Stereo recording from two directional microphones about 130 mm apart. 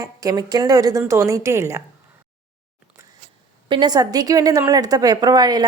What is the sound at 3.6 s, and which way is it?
Speech, 35° right (ahead or behind).